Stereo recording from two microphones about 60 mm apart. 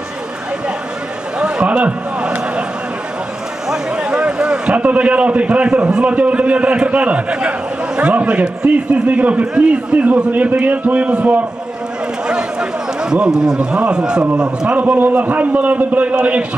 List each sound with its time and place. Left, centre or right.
1.4 s a sound: centre
3.7 s a man's voice: centre
14.8 s a man's voice: right